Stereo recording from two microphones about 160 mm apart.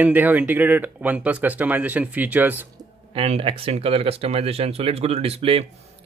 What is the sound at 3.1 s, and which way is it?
Speech, 35° right (ahead or behind).